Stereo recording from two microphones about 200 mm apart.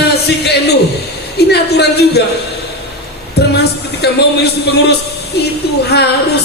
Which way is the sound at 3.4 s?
55° left (ahead or behind).